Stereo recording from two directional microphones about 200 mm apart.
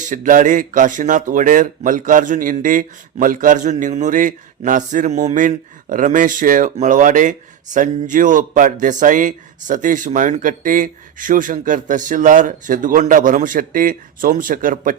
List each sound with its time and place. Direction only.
0.0 s speech: 40° right (ahead or behind)